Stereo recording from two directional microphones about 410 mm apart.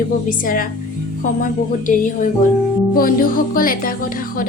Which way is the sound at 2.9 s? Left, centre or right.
Centre.